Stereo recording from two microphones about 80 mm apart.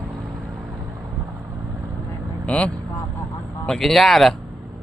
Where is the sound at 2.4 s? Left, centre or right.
Centre.